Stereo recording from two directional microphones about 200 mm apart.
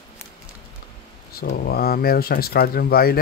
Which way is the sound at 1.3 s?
50° left (ahead or behind).